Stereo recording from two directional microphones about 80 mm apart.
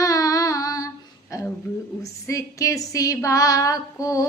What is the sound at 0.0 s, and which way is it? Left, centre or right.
Music, left.